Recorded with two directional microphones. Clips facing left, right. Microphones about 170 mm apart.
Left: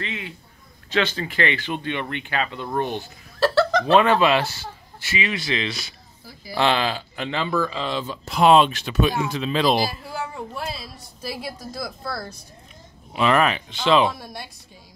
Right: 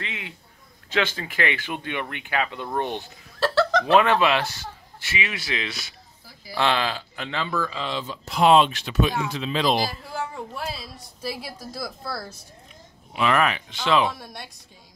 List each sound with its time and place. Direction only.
0.0 s a sound: 15° right (ahead or behind)
0.9 s speech: 10° right (ahead or behind)
3.3 s a sound: 5° left (ahead or behind)
3.8 s speech: centre (ahead or behind)
6.5 s speech: 10° left (ahead or behind)
7.2 s speech: 25° left (ahead or behind)
7.9 s speech: 50° left (ahead or behind)
10.5 s speech: centre (ahead or behind)
13.1 s speech: 30° left (ahead or behind)
14.1 s speech: centre (ahead or behind)